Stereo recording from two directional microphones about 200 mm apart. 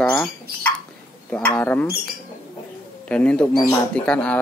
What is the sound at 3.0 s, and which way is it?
Speech, 5° left (ahead or behind).